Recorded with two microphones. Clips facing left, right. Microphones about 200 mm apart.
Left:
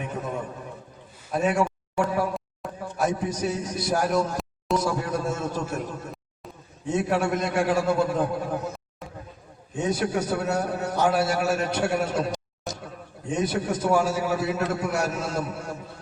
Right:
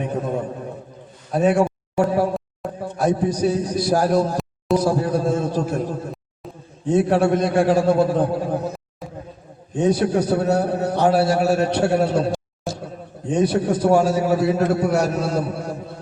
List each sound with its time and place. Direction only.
0.0 s a man's voice: 35° right (ahead or behind)
13.3 s a man's voice: 35° right (ahead or behind)